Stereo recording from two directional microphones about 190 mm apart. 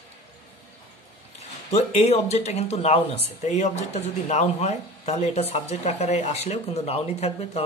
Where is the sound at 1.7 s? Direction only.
35° left (ahead or behind).